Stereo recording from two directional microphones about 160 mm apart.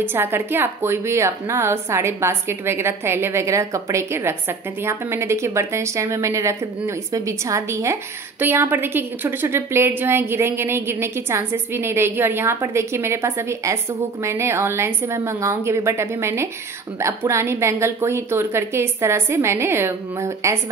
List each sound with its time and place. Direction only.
0.0 s a woman's voice: 15° right (ahead or behind)